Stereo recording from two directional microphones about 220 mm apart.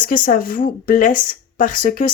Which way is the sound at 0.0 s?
40° left (ahead or behind).